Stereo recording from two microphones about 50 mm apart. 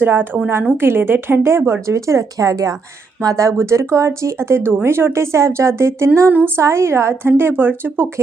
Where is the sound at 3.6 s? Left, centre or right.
Right.